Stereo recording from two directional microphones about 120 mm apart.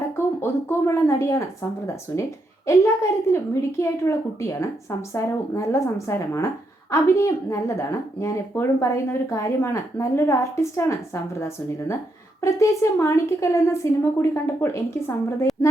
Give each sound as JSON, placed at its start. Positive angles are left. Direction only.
{"t": 0.4, "sound": "a woman's voice", "side_deg": 20}